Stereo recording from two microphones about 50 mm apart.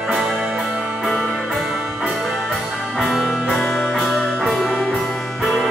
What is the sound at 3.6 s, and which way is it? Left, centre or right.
Music, centre.